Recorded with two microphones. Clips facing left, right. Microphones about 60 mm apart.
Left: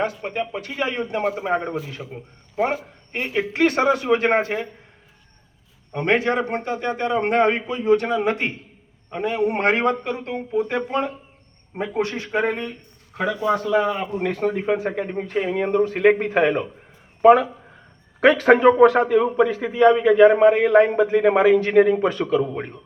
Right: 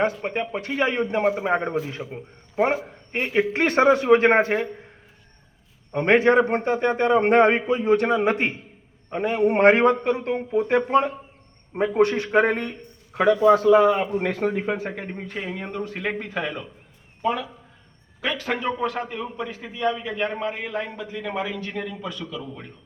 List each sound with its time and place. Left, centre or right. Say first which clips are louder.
0.3 s a man's voice: right 1 dB; right
2.0 s a man's voice: right 1 dB; centre
2.6 s a man's voice: right 1 dB; centre
5.9 s a man's voice: right 1 dB; centre
6.1 s a man's voice: right 4 dB; right
11.7 s a man's voice: right 5 dB; centre
13.7 s a man's voice: right 4 dB; centre
14.6 s speech: left 5 dB; centre
15.5 s speech: left 10 dB; left
17.2 s a man's voice: left 12 dB; left